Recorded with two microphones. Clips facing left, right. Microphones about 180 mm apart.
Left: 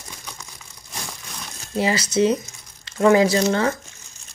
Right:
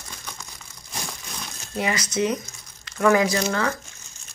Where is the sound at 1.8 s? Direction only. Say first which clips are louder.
Left 5 dB; 30° left (ahead or behind).